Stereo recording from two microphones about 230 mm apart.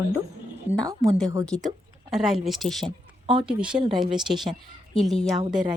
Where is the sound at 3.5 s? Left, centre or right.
Centre.